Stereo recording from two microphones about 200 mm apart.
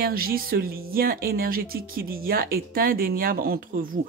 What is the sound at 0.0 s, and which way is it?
Speech, 50° right (ahead or behind).